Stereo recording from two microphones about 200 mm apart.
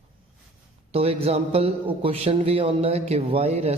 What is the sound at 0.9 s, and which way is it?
A man's voice, 30° right (ahead or behind).